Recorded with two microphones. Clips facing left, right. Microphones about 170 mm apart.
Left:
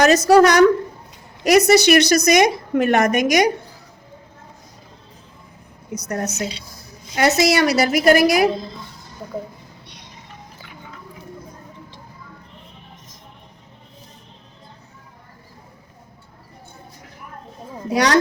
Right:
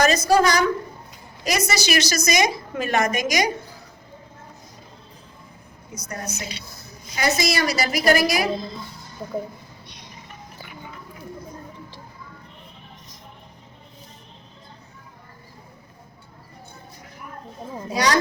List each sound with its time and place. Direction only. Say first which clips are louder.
0.0 s a woman's voice: left 6 dB; 70° left (ahead or behind)
5.9 s a woman's voice: left 8 dB; 65° left (ahead or behind)
17.9 s a woman's voice: left 5 dB; 70° left (ahead or behind)